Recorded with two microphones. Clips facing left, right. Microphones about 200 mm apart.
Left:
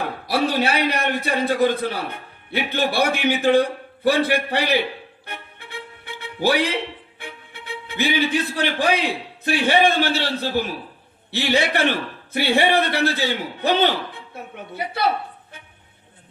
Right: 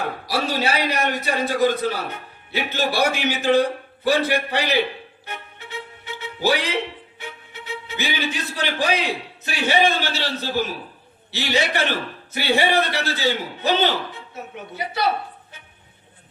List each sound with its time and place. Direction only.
0.4 s a man's voice: 60° left (ahead or behind)
5.2 s music: 60° left (ahead or behind)
9.4 s a man's voice: 55° left (ahead or behind)